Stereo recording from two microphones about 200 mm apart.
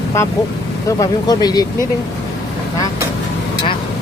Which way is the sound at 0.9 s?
20° left (ahead or behind).